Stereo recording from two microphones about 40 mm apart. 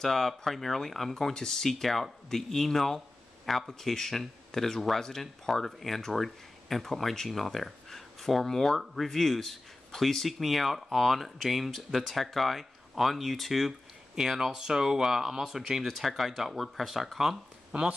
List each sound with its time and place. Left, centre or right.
0.0 s speech: centre
14.1 s speech: centre
17.7 s speech: right